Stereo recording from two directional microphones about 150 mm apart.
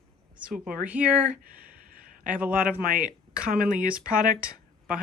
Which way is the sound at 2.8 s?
70° right (ahead or behind).